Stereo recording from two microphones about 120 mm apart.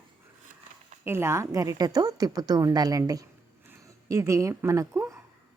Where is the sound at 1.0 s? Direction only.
20° right (ahead or behind).